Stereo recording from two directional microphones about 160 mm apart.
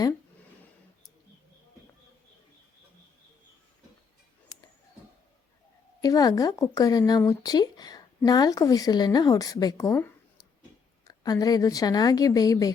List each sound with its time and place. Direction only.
6.0 s speech: 25° left (ahead or behind)